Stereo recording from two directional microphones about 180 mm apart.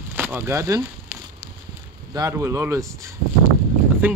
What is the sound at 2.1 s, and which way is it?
Speech, 15° right (ahead or behind).